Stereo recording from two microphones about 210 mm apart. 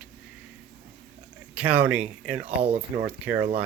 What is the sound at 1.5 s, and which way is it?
Speech, 5° right (ahead or behind).